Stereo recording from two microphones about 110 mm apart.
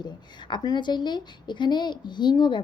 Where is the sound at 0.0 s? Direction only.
40° left (ahead or behind).